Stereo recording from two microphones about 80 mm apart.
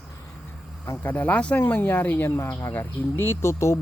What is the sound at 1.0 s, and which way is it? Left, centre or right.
Speech, left.